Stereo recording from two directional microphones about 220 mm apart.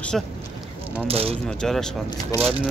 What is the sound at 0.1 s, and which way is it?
Speech, centre (ahead or behind).